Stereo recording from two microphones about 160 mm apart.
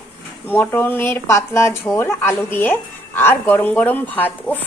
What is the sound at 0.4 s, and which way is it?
A woman's voice, 10° left (ahead or behind).